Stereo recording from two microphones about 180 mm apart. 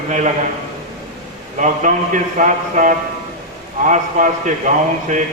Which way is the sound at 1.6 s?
45° right (ahead or behind).